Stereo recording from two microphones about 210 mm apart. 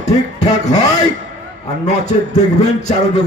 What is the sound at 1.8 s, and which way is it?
Speech, 35° left (ahead or behind).